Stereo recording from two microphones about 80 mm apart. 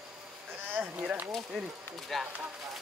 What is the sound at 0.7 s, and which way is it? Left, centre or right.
Speech, right.